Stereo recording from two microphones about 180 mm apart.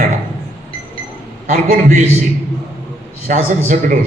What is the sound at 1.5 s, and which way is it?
Speech, 45° right (ahead or behind).